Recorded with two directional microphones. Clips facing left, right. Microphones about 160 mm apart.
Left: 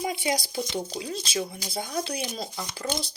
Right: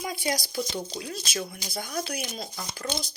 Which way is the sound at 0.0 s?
20° left (ahead or behind).